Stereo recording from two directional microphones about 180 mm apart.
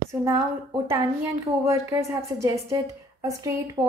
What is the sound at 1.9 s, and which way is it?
A woman's voice, 15° right (ahead or behind).